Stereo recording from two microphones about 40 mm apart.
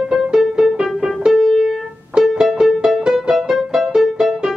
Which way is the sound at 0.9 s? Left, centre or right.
Centre.